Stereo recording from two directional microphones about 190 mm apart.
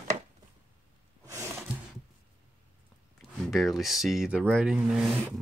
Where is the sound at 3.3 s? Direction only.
Centre (ahead or behind).